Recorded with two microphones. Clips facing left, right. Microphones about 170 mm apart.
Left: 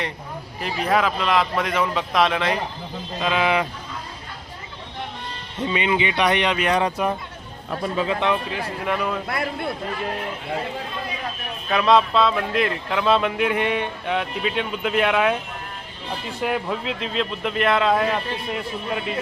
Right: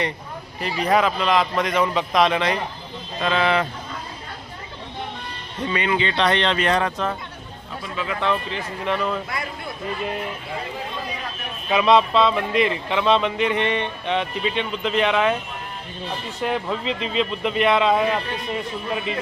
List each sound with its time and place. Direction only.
0.6 s speech: centre (ahead or behind)
3.2 s speech: 10° left (ahead or behind)
5.6 s speech: 20° left (ahead or behind)
7.9 s speech: 30° left (ahead or behind)
8.3 s speech: 10° left (ahead or behind)
9.2 s speech: 60° left (ahead or behind)
11.7 s speech: centre (ahead or behind)
16.4 s speech: 5° left (ahead or behind)